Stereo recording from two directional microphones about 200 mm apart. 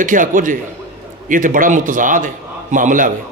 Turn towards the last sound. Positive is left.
turn(degrees=-40)  # may be behind; listen again after turning